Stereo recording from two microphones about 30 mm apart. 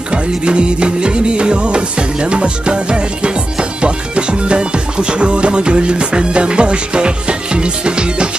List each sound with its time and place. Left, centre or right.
0.1 s music: right